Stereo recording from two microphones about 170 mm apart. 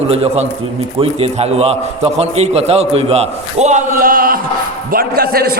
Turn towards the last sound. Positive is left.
turn(degrees=-65)  # may be behind; listen again after turning